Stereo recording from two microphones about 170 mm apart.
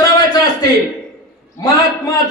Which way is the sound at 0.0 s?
25° left (ahead or behind).